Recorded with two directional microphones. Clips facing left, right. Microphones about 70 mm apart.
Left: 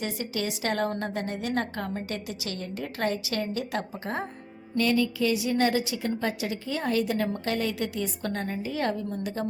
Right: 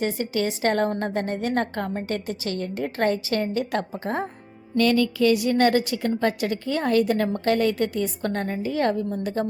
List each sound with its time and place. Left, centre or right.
0.0 s a woman's voice: right
4.8 s a woman's voice: right